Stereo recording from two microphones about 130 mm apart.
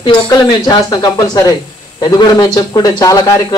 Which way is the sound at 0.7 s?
30° left (ahead or behind).